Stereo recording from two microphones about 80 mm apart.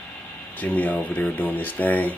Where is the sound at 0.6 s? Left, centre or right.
Centre.